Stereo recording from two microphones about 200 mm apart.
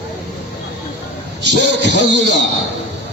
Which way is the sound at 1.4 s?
60° right (ahead or behind).